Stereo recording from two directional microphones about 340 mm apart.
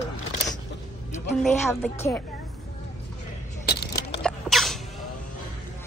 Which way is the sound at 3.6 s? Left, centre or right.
Left.